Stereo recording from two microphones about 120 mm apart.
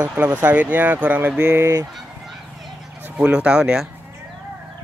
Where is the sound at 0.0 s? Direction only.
10° right (ahead or behind).